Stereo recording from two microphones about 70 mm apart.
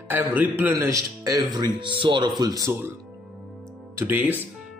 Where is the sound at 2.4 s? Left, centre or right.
Right.